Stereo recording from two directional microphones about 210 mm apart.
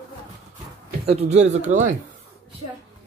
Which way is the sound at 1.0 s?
30° right (ahead or behind).